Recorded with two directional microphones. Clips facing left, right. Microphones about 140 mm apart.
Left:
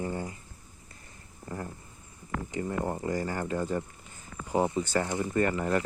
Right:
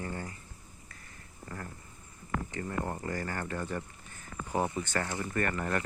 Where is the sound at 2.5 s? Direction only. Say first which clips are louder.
Left 7 dB; 15° left (ahead or behind).